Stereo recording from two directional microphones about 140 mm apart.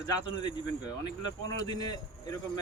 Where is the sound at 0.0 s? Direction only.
30° left (ahead or behind).